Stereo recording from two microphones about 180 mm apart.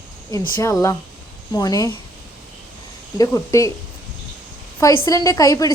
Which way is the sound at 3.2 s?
15° left (ahead or behind).